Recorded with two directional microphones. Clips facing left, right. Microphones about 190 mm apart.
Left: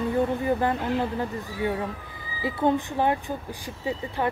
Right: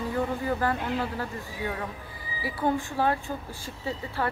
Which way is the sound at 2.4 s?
20° left (ahead or behind).